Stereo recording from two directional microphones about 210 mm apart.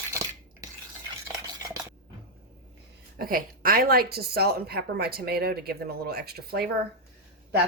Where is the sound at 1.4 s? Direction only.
15° right (ahead or behind).